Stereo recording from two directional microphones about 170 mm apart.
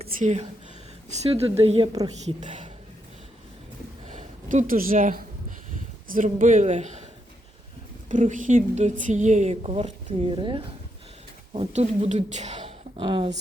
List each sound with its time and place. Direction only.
0.0 s a sound: 40° right (ahead or behind)
1.2 s speech: 35° right (ahead or behind)
2.2 s a woman's voice: 45° right (ahead or behind)
4.1 s a woman's voice: 50° right (ahead or behind)
8.1 s a woman's voice: 50° right (ahead or behind); by 13.3 s 30° right (ahead or behind)